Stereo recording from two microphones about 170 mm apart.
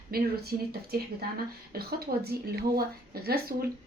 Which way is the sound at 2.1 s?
60° right (ahead or behind).